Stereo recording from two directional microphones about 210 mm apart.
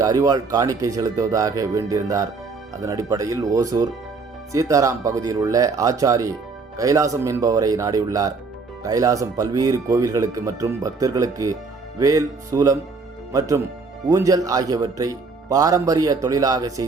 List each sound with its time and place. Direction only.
0.0 s speech: 15° right (ahead or behind)